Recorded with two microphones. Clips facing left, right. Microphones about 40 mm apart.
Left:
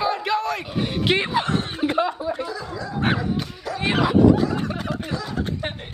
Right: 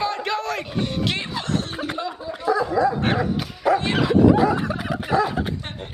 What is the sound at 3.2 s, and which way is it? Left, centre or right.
Speech, right.